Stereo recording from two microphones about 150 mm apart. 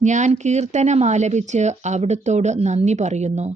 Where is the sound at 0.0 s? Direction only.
55° right (ahead or behind).